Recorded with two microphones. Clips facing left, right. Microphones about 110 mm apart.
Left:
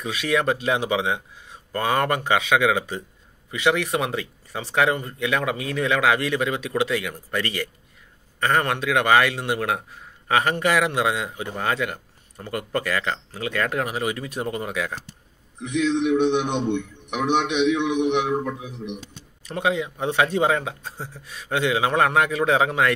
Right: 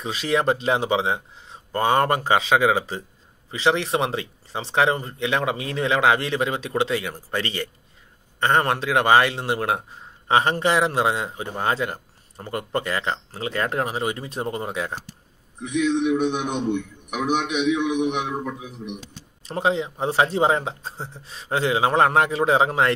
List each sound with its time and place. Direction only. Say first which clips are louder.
0.0 s a man's voice: right 1 dB; 30° right (ahead or behind)
15.7 s a man's voice: even; 10° right (ahead or behind)
19.4 s a man's voice: right 1 dB; 30° right (ahead or behind)